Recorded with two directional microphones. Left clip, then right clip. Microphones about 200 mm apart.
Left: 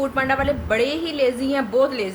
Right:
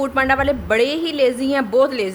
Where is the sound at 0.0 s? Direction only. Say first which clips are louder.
Right 3 dB; 55° right (ahead or behind).